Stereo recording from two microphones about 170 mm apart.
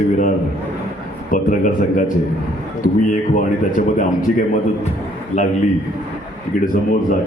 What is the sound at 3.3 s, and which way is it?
Speech, 50° left (ahead or behind).